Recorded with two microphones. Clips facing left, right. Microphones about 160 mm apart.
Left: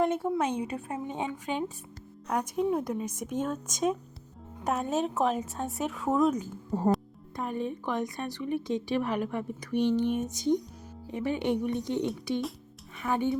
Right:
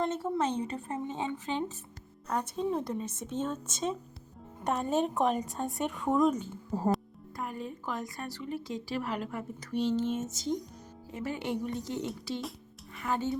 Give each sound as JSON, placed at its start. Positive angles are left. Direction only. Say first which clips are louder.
{"t": 0.0, "sound": "a woman's voice", "louder": "left 3 dB", "side_deg": 10}
{"t": 7.3, "sound": "a woman's voice", "louder": "left 6 dB", "side_deg": 20}